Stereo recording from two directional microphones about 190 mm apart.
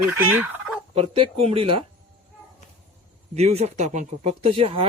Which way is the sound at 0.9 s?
30° right (ahead or behind).